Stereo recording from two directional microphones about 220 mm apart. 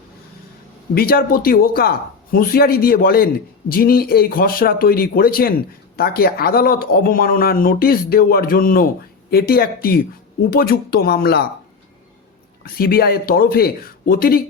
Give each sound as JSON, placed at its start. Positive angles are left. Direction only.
{"t": 0.9, "sound": "speech", "side_deg": 45}
{"t": 12.6, "sound": "speech", "side_deg": 45}